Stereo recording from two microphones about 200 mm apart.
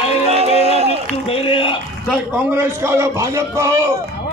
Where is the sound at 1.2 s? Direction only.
25° left (ahead or behind).